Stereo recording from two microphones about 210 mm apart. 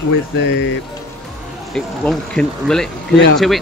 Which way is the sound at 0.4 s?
65° left (ahead or behind).